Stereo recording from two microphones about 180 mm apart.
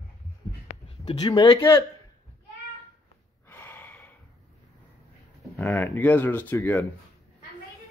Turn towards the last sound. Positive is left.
turn(degrees=15)  # may be behind; listen again after turning